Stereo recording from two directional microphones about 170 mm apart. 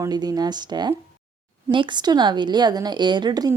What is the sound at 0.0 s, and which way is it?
A woman's voice, 25° right (ahead or behind).